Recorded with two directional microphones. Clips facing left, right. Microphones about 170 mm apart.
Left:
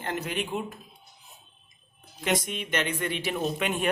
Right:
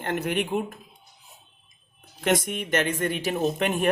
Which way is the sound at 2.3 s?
50° right (ahead or behind).